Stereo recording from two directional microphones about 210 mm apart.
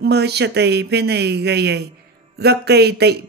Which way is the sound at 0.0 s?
50° right (ahead or behind).